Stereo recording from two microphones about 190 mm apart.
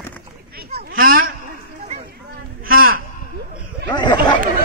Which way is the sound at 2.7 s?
50° right (ahead or behind).